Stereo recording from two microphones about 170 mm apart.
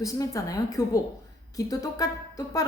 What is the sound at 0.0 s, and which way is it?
Speech, 20° left (ahead or behind).